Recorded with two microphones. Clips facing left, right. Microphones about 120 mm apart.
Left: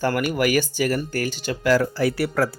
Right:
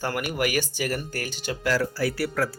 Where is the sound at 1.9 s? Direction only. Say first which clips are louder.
Left 4 dB; 20° left (ahead or behind).